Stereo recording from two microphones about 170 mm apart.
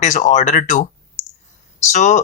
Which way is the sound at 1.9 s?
45° left (ahead or behind).